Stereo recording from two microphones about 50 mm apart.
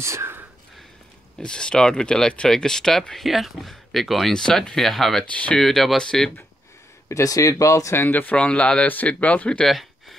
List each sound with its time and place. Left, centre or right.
0.0 s speech: right
1.4 s speech: centre
3.3 s speech: centre
5.3 s speech: left
5.6 s speech: centre
7.1 s speech: left
8.1 s speech: left
8.4 s speech: left
9.7 s a sound: centre